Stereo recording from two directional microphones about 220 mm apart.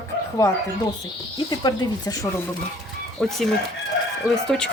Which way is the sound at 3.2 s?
Centre (ahead or behind).